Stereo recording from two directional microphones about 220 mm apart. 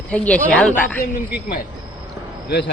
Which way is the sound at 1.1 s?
40° left (ahead or behind).